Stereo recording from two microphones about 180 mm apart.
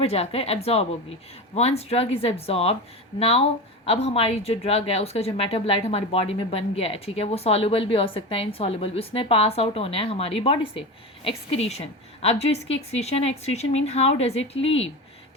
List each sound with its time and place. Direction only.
0.0 s speech: 35° left (ahead or behind)